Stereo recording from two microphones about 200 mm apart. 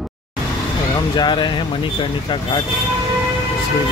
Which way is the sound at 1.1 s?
20° left (ahead or behind).